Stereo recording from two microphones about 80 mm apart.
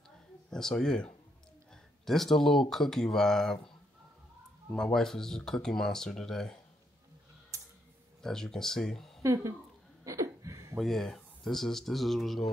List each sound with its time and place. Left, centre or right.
0.5 s speech: centre
1.7 s a sound: centre
2.7 s speech: centre
4.6 s speech: centre
7.5 s tick: right
8.2 s speech: centre
9.2 s speech: right
10.0 s a sound: right
10.8 s speech: centre